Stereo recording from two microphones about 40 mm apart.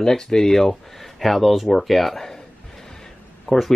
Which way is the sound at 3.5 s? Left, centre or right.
Centre.